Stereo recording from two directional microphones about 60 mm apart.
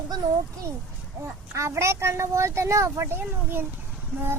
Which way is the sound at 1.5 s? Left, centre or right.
Right.